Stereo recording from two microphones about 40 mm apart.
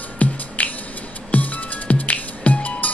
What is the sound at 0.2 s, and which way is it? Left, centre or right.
Music, left.